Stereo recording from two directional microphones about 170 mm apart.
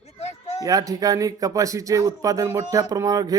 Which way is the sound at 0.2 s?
40° left (ahead or behind).